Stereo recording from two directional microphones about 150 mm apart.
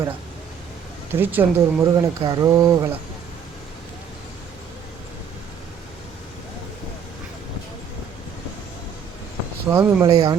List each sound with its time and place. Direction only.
1.1 s speech: 15° right (ahead or behind)
9.6 s speech: 20° right (ahead or behind)